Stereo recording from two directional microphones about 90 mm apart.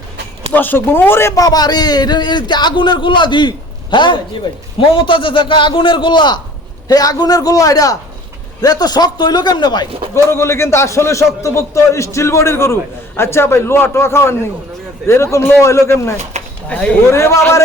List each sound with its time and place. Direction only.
0.5 s a man's voice: 20° left (ahead or behind)
1.4 s a man's voice: 45° left (ahead or behind)
6.8 s a man's voice: 45° left (ahead or behind)
10.2 s a man's voice: 30° left (ahead or behind)
16.6 s speech: 15° left (ahead or behind)
17.1 s a man's voice: 30° left (ahead or behind)